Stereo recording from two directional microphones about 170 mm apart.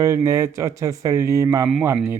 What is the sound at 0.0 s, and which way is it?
Speech, 15° right (ahead or behind).